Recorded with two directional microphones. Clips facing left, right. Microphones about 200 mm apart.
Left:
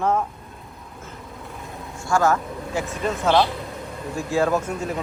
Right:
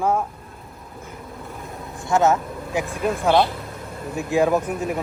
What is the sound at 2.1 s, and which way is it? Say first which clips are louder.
Speech: right 2 dB; 20° right (ahead or behind).